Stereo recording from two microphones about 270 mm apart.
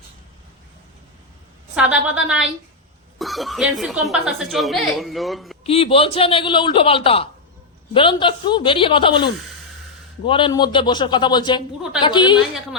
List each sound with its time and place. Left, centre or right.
1.7 s speech: centre
5.6 s a man's voice: left